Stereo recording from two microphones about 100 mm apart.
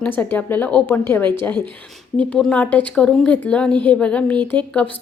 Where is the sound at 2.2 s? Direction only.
10° left (ahead or behind).